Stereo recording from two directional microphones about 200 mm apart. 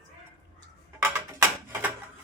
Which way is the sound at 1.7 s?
10° right (ahead or behind).